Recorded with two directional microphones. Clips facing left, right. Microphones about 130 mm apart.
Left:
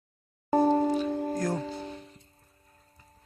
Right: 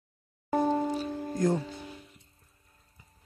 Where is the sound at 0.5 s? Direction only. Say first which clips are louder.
Left 4 dB; 40° left (ahead or behind).